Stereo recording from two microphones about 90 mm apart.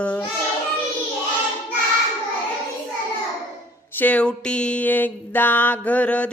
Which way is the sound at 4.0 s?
15° left (ahead or behind).